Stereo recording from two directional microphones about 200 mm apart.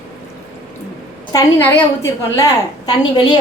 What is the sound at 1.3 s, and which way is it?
A woman's voice, 10° left (ahead or behind).